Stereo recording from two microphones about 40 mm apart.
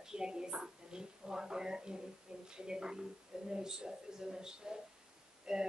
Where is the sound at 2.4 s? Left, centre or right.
Centre.